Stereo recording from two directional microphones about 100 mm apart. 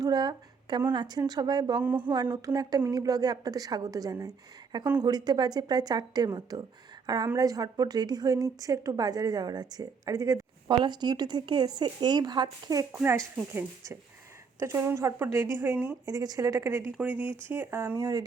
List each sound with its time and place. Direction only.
0.0 s a sound: 40° right (ahead or behind)
0.9 s speech: 45° right (ahead or behind)
1.8 s speech: 20° right (ahead or behind)
2.3 s a woman's voice: 40° right (ahead or behind)
10.7 s speech: 45° right (ahead or behind)
13.0 s speech: 25° right (ahead or behind)
16.0 s a woman's voice: 40° right (ahead or behind)